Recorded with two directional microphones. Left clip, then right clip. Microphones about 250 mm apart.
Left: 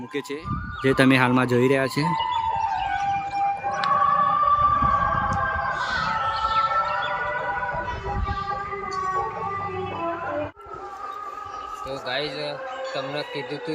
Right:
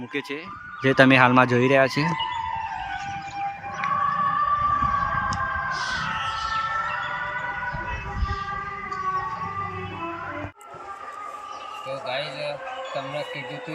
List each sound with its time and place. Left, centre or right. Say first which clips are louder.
0.8 s speech: right 3 dB; centre
3.8 s siren: left 3 dB; left
5.9 s music: left 3 dB; left
12.0 s a sound: left 2 dB; centre